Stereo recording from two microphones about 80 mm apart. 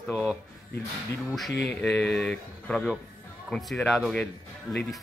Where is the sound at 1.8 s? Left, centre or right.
Centre.